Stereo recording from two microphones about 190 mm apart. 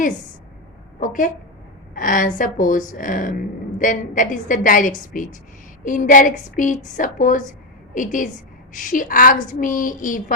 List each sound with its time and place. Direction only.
0.9 s a woman's voice: 45° left (ahead or behind)